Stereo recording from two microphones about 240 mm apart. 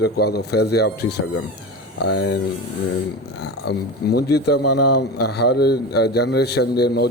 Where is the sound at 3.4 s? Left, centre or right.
Left.